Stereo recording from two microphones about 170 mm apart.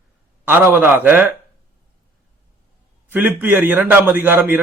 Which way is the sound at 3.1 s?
10° right (ahead or behind).